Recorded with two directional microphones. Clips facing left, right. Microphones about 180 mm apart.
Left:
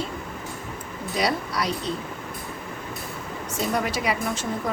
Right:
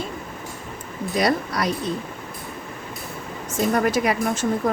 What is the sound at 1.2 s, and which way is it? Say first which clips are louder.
Speech: right 3 dB; 50° right (ahead or behind).